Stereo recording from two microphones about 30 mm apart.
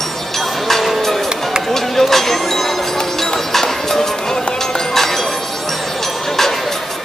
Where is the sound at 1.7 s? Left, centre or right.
Centre.